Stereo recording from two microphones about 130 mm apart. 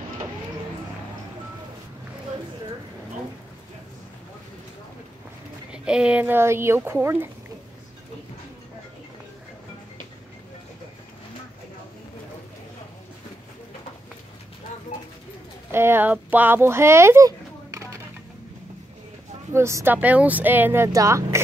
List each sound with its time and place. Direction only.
5.7 s speech: 5° right (ahead or behind)
15.7 s speech: 20° right (ahead or behind)
19.5 s speech: 20° right (ahead or behind)